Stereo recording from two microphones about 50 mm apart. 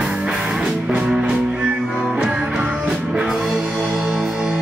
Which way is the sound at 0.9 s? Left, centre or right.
Right.